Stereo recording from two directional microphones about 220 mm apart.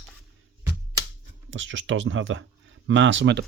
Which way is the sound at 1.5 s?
60° right (ahead or behind).